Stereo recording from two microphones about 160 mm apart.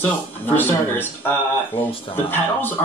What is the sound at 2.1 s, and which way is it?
Speech, 10° left (ahead or behind).